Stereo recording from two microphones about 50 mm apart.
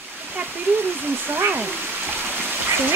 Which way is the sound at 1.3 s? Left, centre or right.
Right.